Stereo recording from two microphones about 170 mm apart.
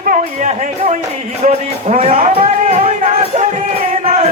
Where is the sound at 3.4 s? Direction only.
40° right (ahead or behind).